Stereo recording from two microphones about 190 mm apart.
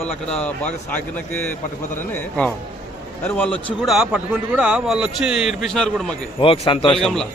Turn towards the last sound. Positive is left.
turn(degrees=0)  # may be behind; listen again after turning